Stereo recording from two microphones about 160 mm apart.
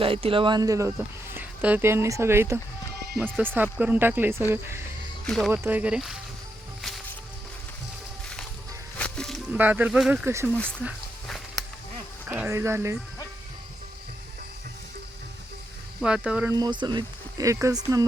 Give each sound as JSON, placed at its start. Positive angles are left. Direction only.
{"t": 0.0, "sound": "speech", "side_deg": -35}
{"t": 5.2, "sound": "speech", "side_deg": 5}
{"t": 5.5, "sound": "speech", "side_deg": -10}
{"t": 9.0, "sound": "music", "side_deg": 5}
{"t": 9.5, "sound": "speech", "side_deg": -10}
{"t": 12.3, "sound": "speech", "side_deg": -10}
{"t": 16.0, "sound": "speech", "side_deg": -5}
{"t": 16.5, "sound": "speech", "side_deg": -25}